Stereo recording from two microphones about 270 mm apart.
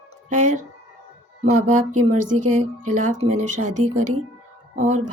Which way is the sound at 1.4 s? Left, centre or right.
Right.